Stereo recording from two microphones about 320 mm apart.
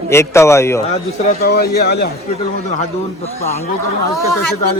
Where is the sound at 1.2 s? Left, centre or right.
Left.